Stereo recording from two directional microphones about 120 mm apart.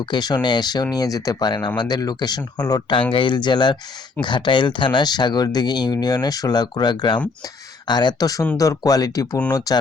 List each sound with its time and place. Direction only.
0.0 s speech: 35° left (ahead or behind)
3.1 s speech: 45° left (ahead or behind)